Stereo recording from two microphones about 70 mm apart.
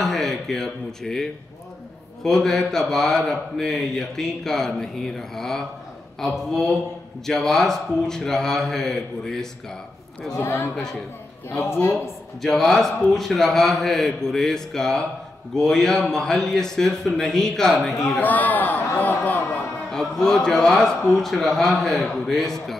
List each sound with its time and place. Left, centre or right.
0.0 s speech: centre
10.3 s a woman's voice: left
11.9 s speech: centre
18.2 s a man's voice: left
19.9 s speech: centre